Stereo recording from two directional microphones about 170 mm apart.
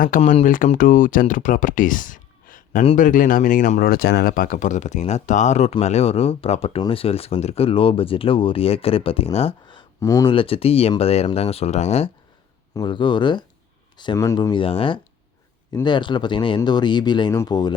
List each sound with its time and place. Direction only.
0.2 s speech: 35° left (ahead or behind)
0.4 s speech: 55° left (ahead or behind); by 10.2 s 20° left (ahead or behind)
10.2 s speech: 30° left (ahead or behind)
12.7 s speech: 30° left (ahead or behind)